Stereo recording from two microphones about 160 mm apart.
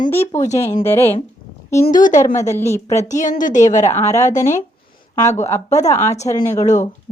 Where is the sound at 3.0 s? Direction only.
50° left (ahead or behind).